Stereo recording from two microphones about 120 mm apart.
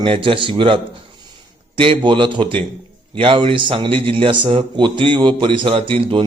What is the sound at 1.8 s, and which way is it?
A man's voice, 45° right (ahead or behind).